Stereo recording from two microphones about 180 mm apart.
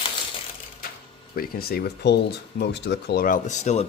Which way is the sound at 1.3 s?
55° left (ahead or behind).